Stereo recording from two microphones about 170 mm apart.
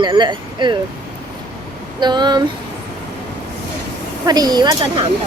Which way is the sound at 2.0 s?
25° right (ahead or behind).